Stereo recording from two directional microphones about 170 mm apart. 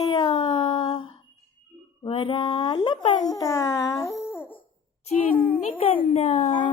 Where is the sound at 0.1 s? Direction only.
30° left (ahead or behind).